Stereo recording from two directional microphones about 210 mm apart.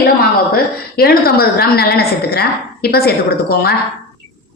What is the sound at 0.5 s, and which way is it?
A woman's voice, 45° left (ahead or behind).